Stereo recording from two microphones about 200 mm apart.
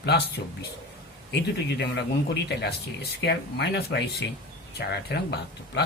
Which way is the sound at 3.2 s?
55° left (ahead or behind).